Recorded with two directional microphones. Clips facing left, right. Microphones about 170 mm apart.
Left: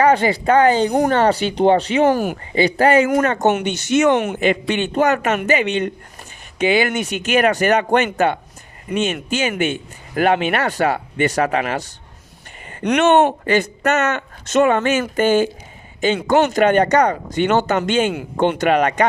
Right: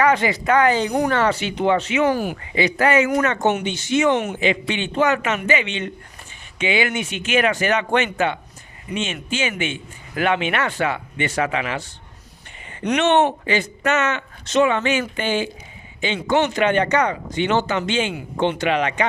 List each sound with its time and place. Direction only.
0.0 s speech: 30° left (ahead or behind)
2.0 s speech: 45° left (ahead or behind)
2.6 s speech: 30° left (ahead or behind)
4.0 s speech: 70° left (ahead or behind)
4.4 s speech: 45° left (ahead or behind)
13.0 s speech: 45° left (ahead or behind)